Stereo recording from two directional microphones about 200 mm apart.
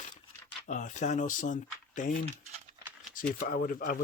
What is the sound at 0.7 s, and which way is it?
Speech, 40° left (ahead or behind).